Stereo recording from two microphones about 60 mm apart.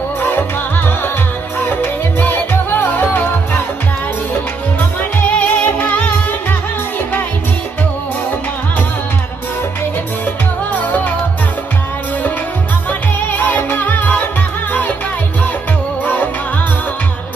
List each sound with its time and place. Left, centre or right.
0.2 s music: left
1.5 s music: left
4.8 s music: left
10.7 s music: left
12.9 s music: left
16.0 s music: left